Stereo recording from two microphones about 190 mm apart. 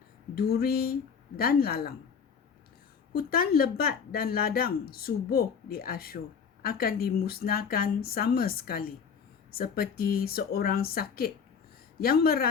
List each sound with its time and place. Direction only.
0.3 s speech: 55° left (ahead or behind)
3.1 s speech: 50° left (ahead or behind)